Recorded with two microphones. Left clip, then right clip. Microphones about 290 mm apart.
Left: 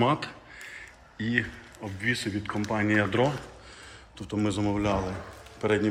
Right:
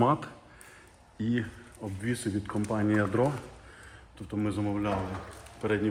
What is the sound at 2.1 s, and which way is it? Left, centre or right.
Speech, centre.